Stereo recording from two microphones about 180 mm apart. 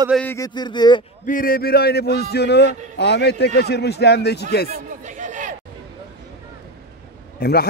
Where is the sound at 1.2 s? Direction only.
50° left (ahead or behind).